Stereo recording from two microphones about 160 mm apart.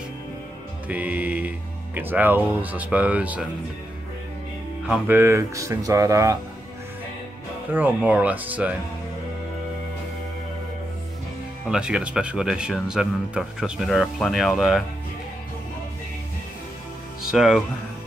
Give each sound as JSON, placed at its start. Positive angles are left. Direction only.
{"t": 0.8, "sound": "speech", "side_deg": -10}
{"t": 4.8, "sound": "speech", "side_deg": -10}
{"t": 7.7, "sound": "speech", "side_deg": -10}
{"t": 11.7, "sound": "speech", "side_deg": -5}
{"t": 17.3, "sound": "speech", "side_deg": 0}